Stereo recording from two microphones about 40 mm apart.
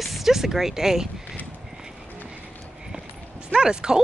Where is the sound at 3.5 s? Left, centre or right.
Centre.